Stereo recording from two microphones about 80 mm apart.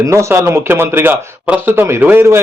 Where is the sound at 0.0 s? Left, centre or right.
Right.